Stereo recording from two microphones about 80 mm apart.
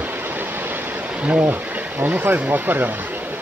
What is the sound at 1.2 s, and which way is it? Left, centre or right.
Speech, right.